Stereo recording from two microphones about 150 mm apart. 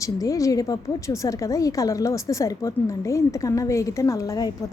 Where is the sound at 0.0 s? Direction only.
20° left (ahead or behind).